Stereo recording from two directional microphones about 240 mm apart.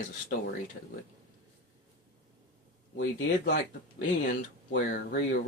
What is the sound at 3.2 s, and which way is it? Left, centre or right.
Speech, left.